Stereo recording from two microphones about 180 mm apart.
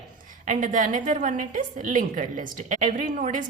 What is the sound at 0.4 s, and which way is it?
A woman's voice, 45° right (ahead or behind).